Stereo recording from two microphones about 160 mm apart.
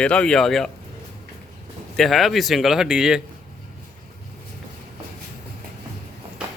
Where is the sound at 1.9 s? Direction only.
Centre (ahead or behind).